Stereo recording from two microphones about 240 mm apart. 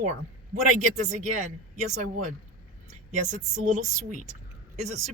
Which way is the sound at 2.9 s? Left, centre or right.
Right.